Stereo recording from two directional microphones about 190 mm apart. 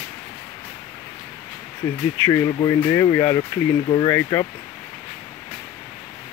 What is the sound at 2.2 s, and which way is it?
Speech, 20° left (ahead or behind).